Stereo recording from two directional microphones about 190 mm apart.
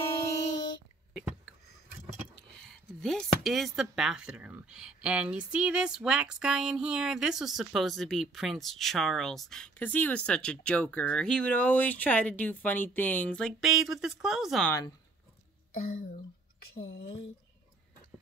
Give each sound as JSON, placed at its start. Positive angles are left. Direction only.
{"t": 2.3, "sound": "speech", "side_deg": 0}
{"t": 15.7, "sound": "speech", "side_deg": 50}